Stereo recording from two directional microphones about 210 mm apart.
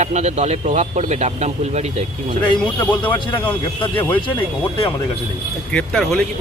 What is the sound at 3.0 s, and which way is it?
Speech, 5° left (ahead or behind).